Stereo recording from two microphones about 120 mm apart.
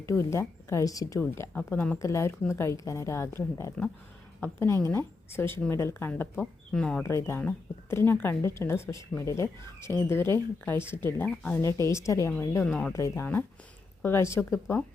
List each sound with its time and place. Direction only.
0.0 s speech: 25° left (ahead or behind)
1.2 s speech: 15° left (ahead or behind)
2.0 s a woman's voice: 25° left (ahead or behind)
6.4 s speech: 5° left (ahead or behind)
7.0 s speech: 25° left (ahead or behind)
11.9 s speech: 25° left (ahead or behind)
12.6 s speech: 10° left (ahead or behind)
12.9 s speech: 20° left (ahead or behind)